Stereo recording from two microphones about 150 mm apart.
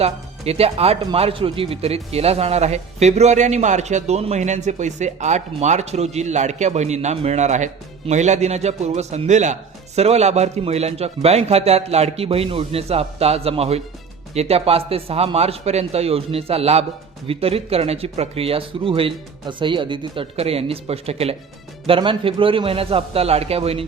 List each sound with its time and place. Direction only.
0.0 s speech: 45° right (ahead or behind)